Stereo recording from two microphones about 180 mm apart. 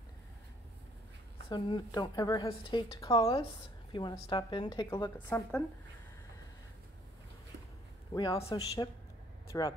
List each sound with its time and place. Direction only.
1.5 s speech: 25° left (ahead or behind)
5.1 s speech: 10° left (ahead or behind)
8.1 s a man's voice: 20° left (ahead or behind)